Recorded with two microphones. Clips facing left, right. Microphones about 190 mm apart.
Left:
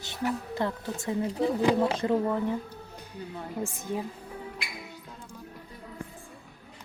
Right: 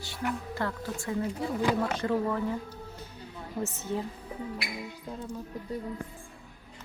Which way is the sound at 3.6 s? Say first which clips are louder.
Right 1 dB; 10° left (ahead or behind).